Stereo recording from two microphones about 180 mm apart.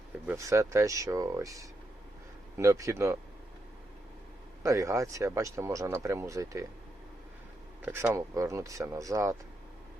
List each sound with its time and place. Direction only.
0.3 s speech: 15° right (ahead or behind)
4.6 s speech: 15° right (ahead or behind)
7.8 s speech: 15° right (ahead or behind)